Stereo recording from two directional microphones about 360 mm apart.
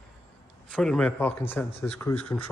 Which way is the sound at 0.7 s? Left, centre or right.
Centre.